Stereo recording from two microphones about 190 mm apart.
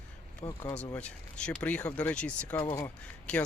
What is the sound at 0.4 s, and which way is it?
Speech, 20° left (ahead or behind).